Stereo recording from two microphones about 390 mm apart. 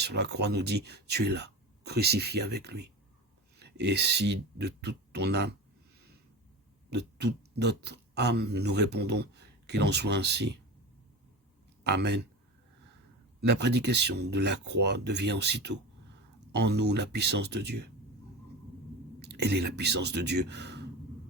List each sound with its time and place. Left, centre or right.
0.0 s speech: right
6.9 s speech: right
11.8 s speech: right
13.4 s speech: right
19.3 s speech: right